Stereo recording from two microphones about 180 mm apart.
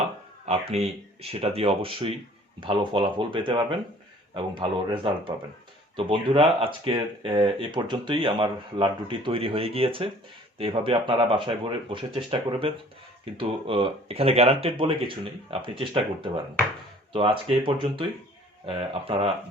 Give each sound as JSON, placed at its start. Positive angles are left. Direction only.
{"t": 0.4, "sound": "speech", "side_deg": -35}